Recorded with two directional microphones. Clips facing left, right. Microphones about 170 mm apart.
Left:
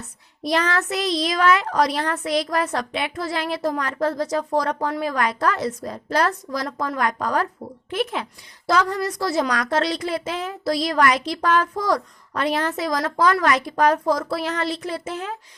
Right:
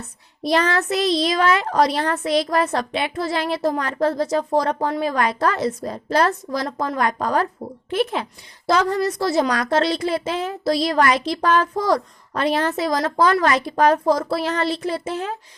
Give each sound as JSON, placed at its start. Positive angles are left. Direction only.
{"t": 0.4, "sound": "a woman's voice", "side_deg": -30}